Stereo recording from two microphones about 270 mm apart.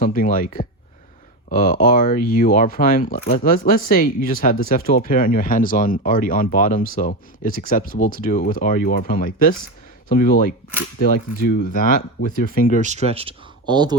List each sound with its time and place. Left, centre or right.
0.0 s speech: left
12.8 s speech: right